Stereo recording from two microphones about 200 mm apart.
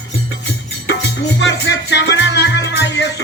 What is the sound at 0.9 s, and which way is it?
Music, 60° left (ahead or behind).